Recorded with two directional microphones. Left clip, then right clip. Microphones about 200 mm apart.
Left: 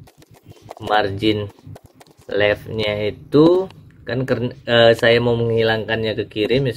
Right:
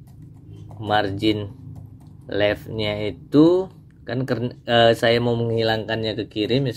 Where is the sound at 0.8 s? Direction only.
20° right (ahead or behind).